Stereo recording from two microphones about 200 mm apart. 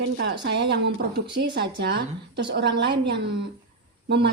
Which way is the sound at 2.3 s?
60° right (ahead or behind).